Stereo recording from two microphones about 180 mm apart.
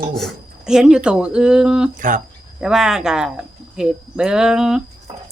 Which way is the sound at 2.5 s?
5° right (ahead or behind).